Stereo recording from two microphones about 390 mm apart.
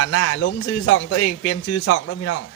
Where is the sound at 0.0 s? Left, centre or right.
Left.